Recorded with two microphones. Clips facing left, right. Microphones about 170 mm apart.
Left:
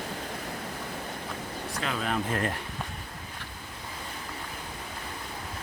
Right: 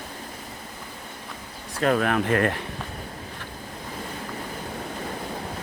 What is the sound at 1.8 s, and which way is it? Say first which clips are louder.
Speech: right 10 dB; 55° right (ahead or behind).